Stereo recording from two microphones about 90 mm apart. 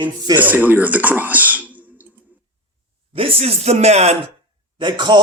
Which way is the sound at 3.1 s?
90° right.